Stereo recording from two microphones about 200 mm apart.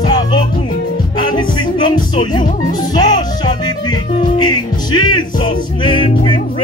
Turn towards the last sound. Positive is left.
turn(degrees=25)  # may be behind; listen again after turning